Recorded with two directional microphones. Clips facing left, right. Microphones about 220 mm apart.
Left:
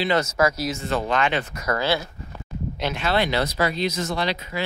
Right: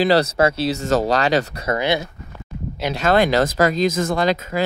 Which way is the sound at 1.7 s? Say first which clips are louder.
Right 2 dB; 20° right (ahead or behind).